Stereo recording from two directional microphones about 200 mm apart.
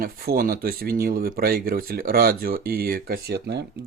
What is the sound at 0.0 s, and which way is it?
Speech, 50° right (ahead or behind).